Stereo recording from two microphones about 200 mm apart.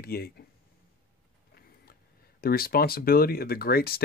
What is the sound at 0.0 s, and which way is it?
Speech, 50° left (ahead or behind).